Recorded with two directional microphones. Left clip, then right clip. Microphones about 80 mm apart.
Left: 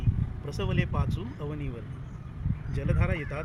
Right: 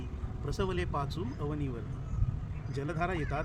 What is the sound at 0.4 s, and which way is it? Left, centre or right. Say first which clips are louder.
A man's voice: left 1 dB; right.